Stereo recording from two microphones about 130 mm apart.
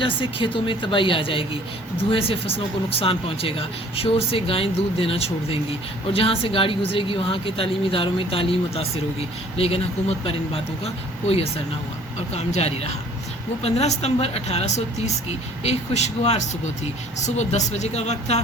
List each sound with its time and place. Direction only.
0.0 s a woman's voice: 40° left (ahead or behind); by 18.3 s 60° left (ahead or behind)